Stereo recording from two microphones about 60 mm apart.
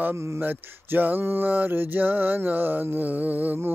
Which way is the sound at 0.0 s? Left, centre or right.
Right.